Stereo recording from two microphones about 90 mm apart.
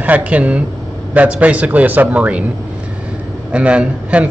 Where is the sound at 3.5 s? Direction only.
15° right (ahead or behind).